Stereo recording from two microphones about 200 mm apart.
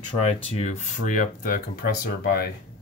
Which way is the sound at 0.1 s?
30° left (ahead or behind).